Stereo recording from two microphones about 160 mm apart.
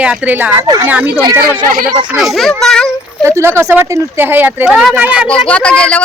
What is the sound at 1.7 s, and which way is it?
Speech, 65° right (ahead or behind).